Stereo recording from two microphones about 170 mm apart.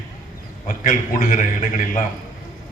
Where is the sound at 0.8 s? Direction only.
50° left (ahead or behind).